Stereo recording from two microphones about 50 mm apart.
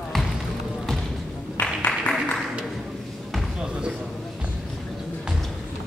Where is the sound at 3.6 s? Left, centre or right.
Centre.